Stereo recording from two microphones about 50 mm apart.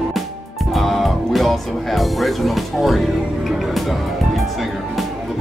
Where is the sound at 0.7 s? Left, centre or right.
Centre.